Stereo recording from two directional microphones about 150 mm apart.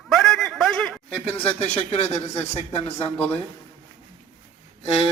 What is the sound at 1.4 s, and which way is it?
A man's voice, 45° left (ahead or behind).